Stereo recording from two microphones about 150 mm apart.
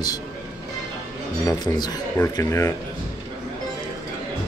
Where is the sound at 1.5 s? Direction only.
25° left (ahead or behind).